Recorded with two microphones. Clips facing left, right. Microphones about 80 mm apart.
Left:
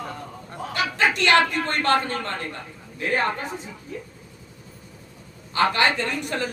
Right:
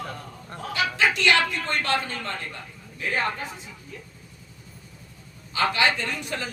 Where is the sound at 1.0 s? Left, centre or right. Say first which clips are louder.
Left 3 dB; left.